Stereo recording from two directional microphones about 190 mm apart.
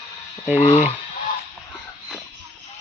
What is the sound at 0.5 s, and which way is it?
Speech, 35° left (ahead or behind).